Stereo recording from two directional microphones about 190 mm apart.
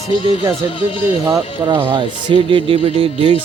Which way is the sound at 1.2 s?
20° right (ahead or behind).